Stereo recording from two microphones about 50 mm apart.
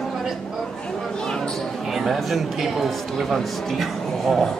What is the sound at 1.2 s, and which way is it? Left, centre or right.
Basketball bounce, centre.